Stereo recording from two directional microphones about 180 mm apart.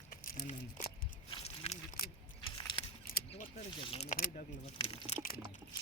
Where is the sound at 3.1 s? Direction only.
55° left (ahead or behind).